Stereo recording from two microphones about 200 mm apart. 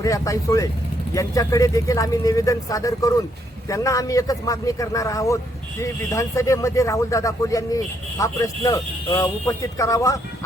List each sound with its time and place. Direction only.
0.0 s speech: 15° left (ahead or behind)